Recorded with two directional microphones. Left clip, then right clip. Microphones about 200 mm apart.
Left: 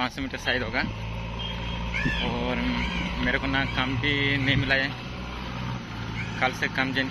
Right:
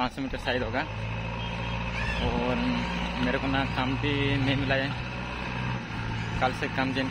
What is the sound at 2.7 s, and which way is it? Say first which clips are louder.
Speech: left 2 dB; 15° left (ahead or behind).